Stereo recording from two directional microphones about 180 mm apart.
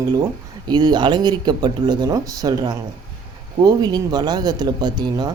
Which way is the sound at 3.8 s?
20° right (ahead or behind).